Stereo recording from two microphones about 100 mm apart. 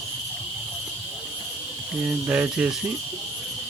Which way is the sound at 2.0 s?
15° right (ahead or behind).